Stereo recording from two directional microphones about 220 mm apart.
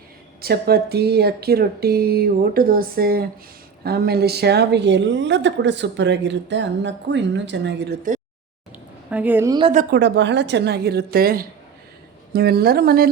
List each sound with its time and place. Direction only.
0.4 s a woman's voice: 45° right (ahead or behind)
9.0 s a woman's voice: 5° right (ahead or behind)
9.7 s a woman's voice: 50° right (ahead or behind)